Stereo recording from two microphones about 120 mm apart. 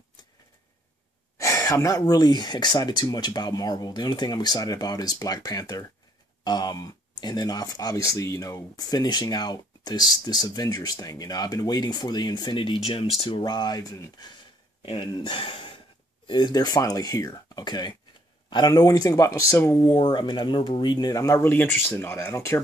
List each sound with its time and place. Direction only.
1.4 s speech: 25° left (ahead or behind); by 13.4 s 55° left (ahead or behind)
13.4 s speech: 35° left (ahead or behind)
14.3 s a sound: 40° left (ahead or behind)
16.3 s speech: 40° left (ahead or behind)
20.0 s speech: 40° left (ahead or behind); by 22.6 s 20° left (ahead or behind)